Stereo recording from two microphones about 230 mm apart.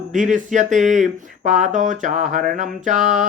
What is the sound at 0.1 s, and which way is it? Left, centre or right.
Music, right.